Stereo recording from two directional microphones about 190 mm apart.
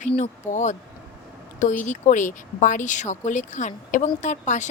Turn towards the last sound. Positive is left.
turn(degrees=40)  # may be behind; listen again after turning